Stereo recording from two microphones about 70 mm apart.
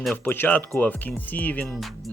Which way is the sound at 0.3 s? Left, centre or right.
Left.